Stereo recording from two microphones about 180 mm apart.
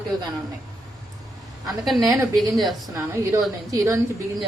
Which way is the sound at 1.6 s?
Centre (ahead or behind).